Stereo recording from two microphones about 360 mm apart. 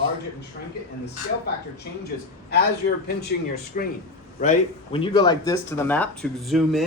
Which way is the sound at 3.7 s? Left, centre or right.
Left.